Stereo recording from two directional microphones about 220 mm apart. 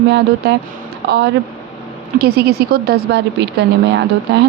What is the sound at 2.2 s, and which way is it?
Speech, 45° right (ahead or behind).